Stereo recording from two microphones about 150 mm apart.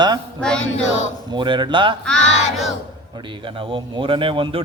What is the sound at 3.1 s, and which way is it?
A man's voice, 35° right (ahead or behind).